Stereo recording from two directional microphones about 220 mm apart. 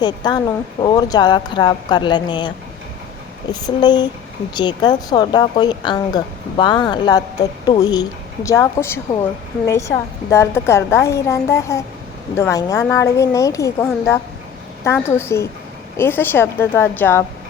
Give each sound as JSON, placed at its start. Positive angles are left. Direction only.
{"t": 0.0, "sound": "a woman's voice", "side_deg": 20}
{"t": 3.5, "sound": "a woman's voice", "side_deg": 20}
{"t": 10.2, "sound": "speech", "side_deg": 10}